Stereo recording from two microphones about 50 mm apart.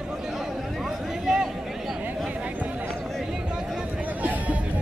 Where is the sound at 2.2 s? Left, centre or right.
Right.